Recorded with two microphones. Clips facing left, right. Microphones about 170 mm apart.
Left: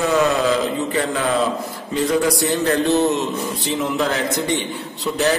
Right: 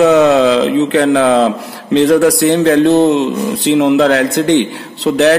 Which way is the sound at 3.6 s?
80° right.